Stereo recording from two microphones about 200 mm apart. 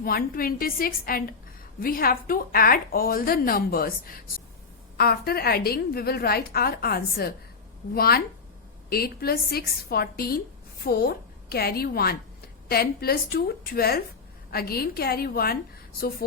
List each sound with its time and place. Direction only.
0.0 s a woman's voice: 45° left (ahead or behind)